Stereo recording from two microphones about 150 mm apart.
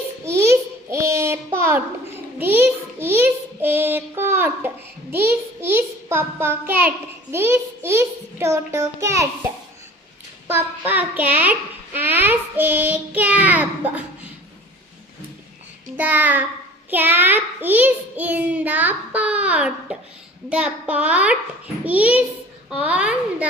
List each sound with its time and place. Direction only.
0.3 s a sound: 20° right (ahead or behind)
2.4 s child singing: 15° right (ahead or behind)
5.1 s a child's voice: 15° right (ahead or behind)
10.4 s child singing: 15° right (ahead or behind)
16.0 s child singing: 10° right (ahead or behind)